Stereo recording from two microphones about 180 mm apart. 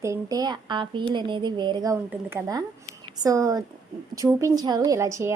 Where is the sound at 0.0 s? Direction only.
20° right (ahead or behind).